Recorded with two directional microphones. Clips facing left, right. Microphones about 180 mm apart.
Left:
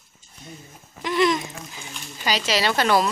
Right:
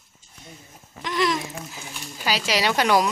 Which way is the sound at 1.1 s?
Centre (ahead or behind).